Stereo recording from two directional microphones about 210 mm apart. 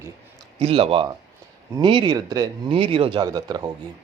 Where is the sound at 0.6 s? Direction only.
25° right (ahead or behind).